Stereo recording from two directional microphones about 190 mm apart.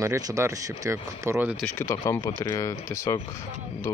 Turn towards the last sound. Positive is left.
turn(degrees=15)  # may be behind; listen again after turning